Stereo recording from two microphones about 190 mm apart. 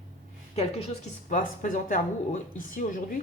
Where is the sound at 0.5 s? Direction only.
35° left (ahead or behind).